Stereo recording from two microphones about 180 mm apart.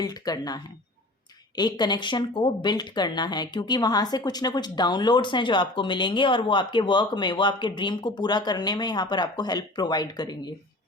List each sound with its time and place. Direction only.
0.0 s speech: 20° left (ahead or behind)